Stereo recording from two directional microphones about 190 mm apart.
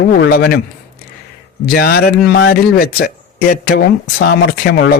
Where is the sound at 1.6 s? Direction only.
50° left (ahead or behind).